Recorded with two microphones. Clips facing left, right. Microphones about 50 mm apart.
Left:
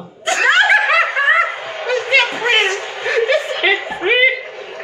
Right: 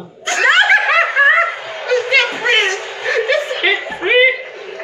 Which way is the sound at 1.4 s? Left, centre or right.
Left.